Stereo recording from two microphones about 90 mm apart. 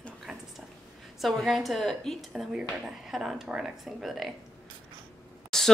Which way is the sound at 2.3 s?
10° right (ahead or behind).